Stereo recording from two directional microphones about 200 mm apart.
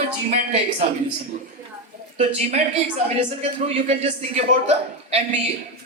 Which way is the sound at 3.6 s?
30° right (ahead or behind).